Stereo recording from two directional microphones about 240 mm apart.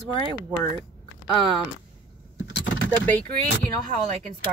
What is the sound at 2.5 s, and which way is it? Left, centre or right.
Keys jangling, left.